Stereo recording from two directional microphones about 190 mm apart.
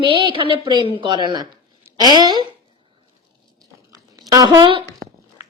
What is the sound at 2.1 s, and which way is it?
Speech, 20° right (ahead or behind).